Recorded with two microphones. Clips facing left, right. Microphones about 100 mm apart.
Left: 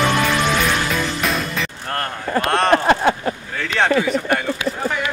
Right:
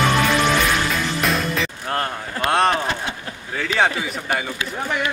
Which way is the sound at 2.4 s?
Centre (ahead or behind).